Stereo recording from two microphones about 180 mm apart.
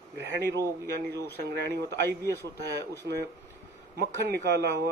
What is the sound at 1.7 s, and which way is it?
Speech, 70° right (ahead or behind).